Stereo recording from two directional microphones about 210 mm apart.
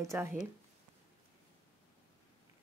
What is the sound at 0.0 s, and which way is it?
Speech, 15° right (ahead or behind).